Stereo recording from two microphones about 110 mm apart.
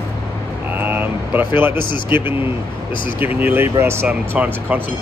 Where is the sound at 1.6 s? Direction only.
20° right (ahead or behind).